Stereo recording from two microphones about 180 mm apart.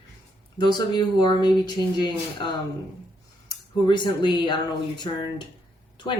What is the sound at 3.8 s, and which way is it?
Speech, 25° left (ahead or behind).